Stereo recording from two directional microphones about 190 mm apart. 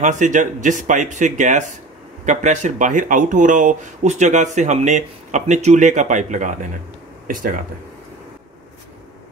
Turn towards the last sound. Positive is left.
turn(degrees=-45)  # may be behind; listen again after turning